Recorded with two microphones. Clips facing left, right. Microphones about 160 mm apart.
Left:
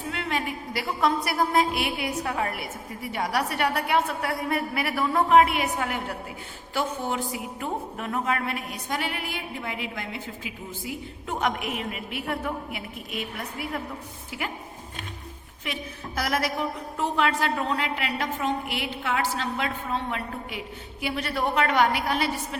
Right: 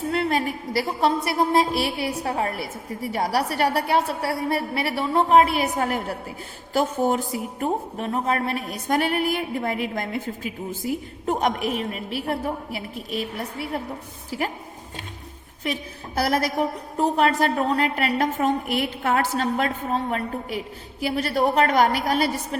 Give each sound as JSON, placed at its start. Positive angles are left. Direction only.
{"t": 0.1, "sound": "a woman's voice", "side_deg": -35}
{"t": 15.6, "sound": "a woman's voice", "side_deg": -35}